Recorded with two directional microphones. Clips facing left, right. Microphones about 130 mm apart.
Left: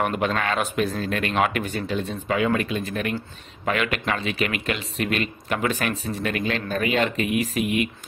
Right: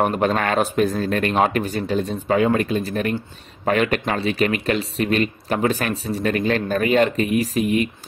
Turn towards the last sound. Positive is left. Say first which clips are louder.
# right 4 dB
turn(degrees=-35)  # may be behind; listen again after turning